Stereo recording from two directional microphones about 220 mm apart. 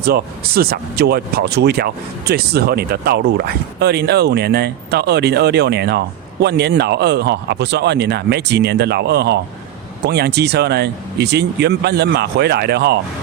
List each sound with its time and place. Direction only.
0.0 s speech: 45° right (ahead or behind)